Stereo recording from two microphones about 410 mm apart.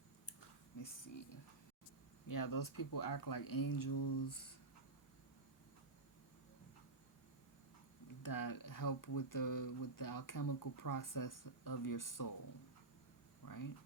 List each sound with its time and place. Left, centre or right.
2.2 s speech: left
8.2 s speech: left
13.4 s a sound: left